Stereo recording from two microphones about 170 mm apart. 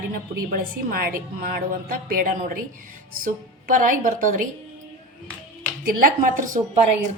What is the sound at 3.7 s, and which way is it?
Speech, 50° right (ahead or behind).